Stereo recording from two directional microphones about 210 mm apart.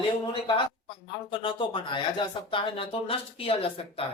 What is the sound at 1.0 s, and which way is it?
Speech, 25° left (ahead or behind).